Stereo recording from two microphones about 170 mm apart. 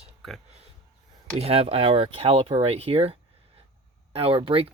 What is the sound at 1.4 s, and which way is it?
Speech, 35° right (ahead or behind).